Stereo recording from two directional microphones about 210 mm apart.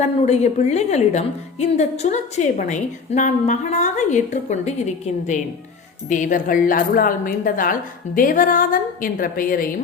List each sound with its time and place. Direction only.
0.0 s a woman's voice: 30° left (ahead or behind)